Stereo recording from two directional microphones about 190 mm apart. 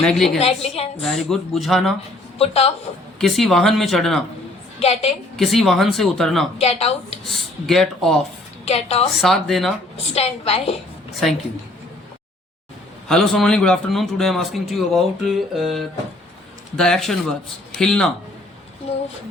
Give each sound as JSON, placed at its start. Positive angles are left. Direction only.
{"t": 0.0, "sound": "a man's voice", "side_deg": 5}
{"t": 0.3, "sound": "a woman's voice", "side_deg": 30}
{"t": 1.0, "sound": "a man's voice", "side_deg": 0}
{"t": 2.4, "sound": "a woman's voice", "side_deg": 35}
{"t": 3.2, "sound": "a man's voice", "side_deg": 0}
{"t": 4.8, "sound": "a woman's voice", "side_deg": 35}
{"t": 5.4, "sound": "a man's voice", "side_deg": 0}
{"t": 6.6, "sound": "a woman's voice", "side_deg": 35}
{"t": 7.3, "sound": "a man's voice", "side_deg": 0}
{"t": 8.6, "sound": "a woman's voice", "side_deg": 30}
{"t": 9.2, "sound": "a man's voice", "side_deg": 0}
{"t": 10.2, "sound": "a woman's voice", "side_deg": 35}
{"t": 13.1, "sound": "a man's voice", "side_deg": 5}
{"t": 18.8, "sound": "a woman's voice", "side_deg": 30}